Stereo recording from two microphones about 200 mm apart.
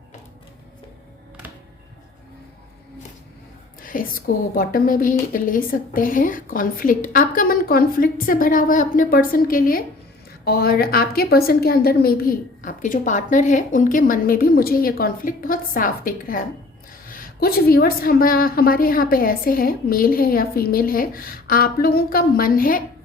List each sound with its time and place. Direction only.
3.8 s a woman's voice: 45° left (ahead or behind)